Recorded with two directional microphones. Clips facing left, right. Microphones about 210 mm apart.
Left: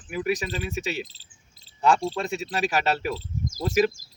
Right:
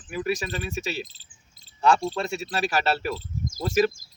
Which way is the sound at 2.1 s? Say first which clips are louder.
Even; 15° left (ahead or behind).